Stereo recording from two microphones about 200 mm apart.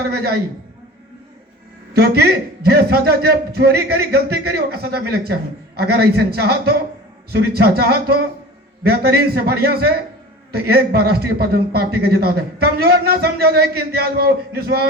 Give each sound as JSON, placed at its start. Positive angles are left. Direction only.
{"t": 0.0, "sound": "a man's voice", "side_deg": -55}
{"t": 1.9, "sound": "a man's voice", "side_deg": -55}